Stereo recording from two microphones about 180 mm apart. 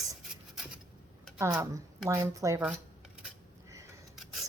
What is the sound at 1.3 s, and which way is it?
A woman's voice, 15° right (ahead or behind).